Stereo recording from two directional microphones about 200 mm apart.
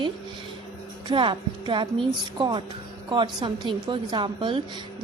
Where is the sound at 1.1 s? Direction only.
25° right (ahead or behind).